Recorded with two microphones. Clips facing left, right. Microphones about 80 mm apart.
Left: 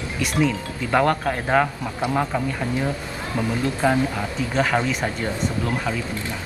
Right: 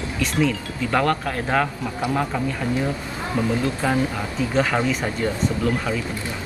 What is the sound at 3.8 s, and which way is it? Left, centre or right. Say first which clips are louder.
Speech: left 4 dB; centre.